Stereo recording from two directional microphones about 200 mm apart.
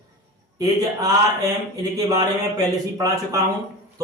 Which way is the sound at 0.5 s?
15° right (ahead or behind).